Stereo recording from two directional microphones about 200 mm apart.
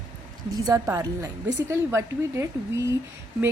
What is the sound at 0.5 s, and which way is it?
A woman's voice, 15° right (ahead or behind).